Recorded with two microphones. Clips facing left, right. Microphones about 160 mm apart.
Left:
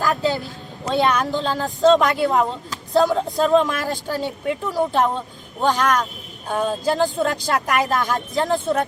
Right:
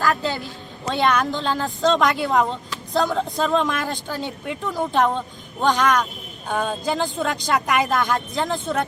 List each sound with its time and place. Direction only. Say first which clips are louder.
0.9 s speech: left 1 dB; 5° left (ahead or behind)